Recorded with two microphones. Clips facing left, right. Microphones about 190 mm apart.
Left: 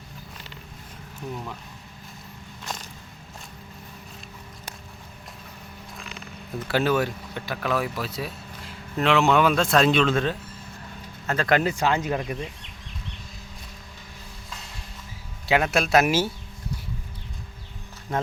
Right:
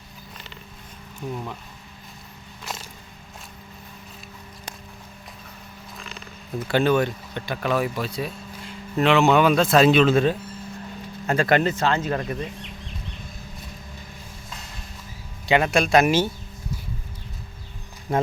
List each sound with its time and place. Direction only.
6.7 s speech: 5° left (ahead or behind); by 11.4 s 15° right (ahead or behind)
11.6 s speech: 10° left (ahead or behind)
15.4 s speech: centre (ahead or behind)
18.1 s speech: 10° right (ahead or behind)